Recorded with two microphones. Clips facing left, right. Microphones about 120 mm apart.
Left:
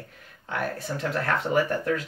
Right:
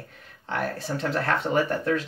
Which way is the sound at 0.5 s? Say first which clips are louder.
Right 1 dB; 30° right (ahead or behind).